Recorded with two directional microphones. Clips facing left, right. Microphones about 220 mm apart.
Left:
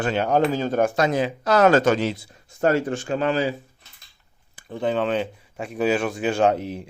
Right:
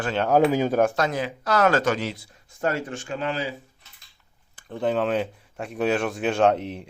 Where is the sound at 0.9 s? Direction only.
20° left (ahead or behind); by 3.5 s 40° left (ahead or behind).